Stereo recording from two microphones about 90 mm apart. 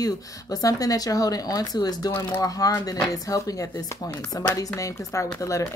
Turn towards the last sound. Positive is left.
turn(degrees=35)  # may be behind; listen again after turning